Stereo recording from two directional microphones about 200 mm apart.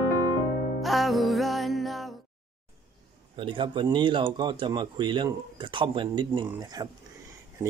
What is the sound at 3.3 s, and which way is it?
Speech, 25° right (ahead or behind).